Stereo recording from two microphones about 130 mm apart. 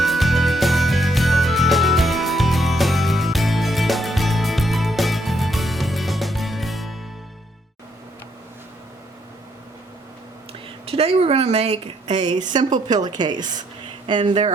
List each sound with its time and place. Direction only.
0.0 s music: centre (ahead or behind)
10.8 s speech: 50° right (ahead or behind)
12.5 s a woman's voice: 35° right (ahead or behind)